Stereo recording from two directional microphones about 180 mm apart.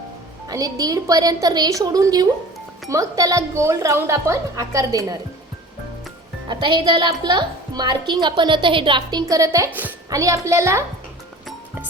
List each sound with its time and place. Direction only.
0.4 s a woman's voice: 20° right (ahead or behind)
6.5 s a woman's voice: 25° right (ahead or behind)